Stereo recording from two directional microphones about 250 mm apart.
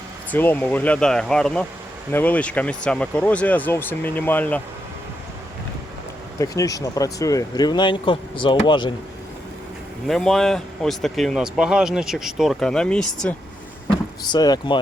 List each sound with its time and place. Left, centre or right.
0.3 s speech: centre
6.4 s speech: centre
10.1 s speech: centre
14.3 s speech: centre